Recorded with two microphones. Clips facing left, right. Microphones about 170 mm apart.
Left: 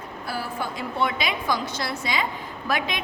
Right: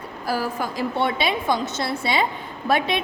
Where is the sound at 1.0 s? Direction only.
30° right (ahead or behind).